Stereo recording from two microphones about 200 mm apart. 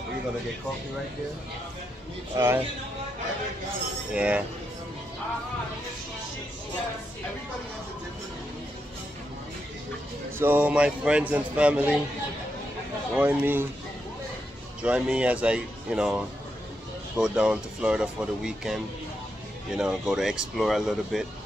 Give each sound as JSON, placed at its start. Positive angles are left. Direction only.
{"t": 2.3, "sound": "speech", "side_deg": -15}
{"t": 4.1, "sound": "speech", "side_deg": -5}
{"t": 10.4, "sound": "a man's voice", "side_deg": -10}
{"t": 13.1, "sound": "speech", "side_deg": -5}
{"t": 14.8, "sound": "a man's voice", "side_deg": -5}
{"t": 17.2, "sound": "a man's voice", "side_deg": -5}